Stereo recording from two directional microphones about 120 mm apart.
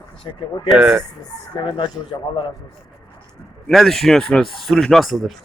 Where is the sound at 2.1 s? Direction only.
35° left (ahead or behind).